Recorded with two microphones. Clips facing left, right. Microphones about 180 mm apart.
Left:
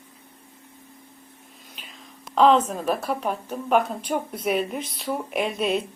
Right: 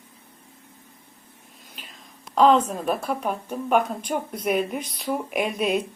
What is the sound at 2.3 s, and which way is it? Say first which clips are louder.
Speech: even; centre (ahead or behind).